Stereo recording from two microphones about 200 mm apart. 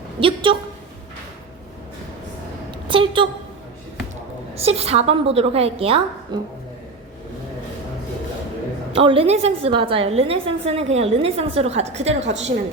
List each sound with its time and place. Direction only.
0.2 s a woman's voice: 25° right (ahead or behind)
2.8 s a woman's voice: 25° right (ahead or behind)
4.5 s a woman's voice: 30° right (ahead or behind)
8.9 s a woman's voice: 30° right (ahead or behind)